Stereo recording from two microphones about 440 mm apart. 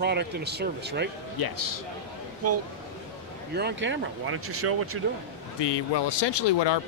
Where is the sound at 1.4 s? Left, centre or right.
Left.